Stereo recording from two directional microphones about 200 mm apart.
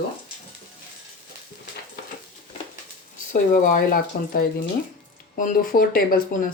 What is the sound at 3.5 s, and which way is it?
Speech, 40° left (ahead or behind).